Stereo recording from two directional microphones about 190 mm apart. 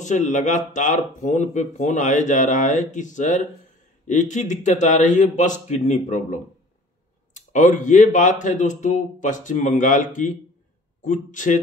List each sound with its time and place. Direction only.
0.0 s speech: 40° left (ahead or behind)